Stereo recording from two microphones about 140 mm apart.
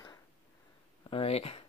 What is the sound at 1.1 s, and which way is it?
Speech, 45° left (ahead or behind).